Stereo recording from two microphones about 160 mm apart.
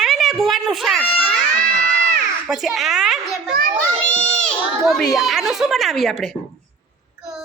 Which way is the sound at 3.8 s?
10° left (ahead or behind).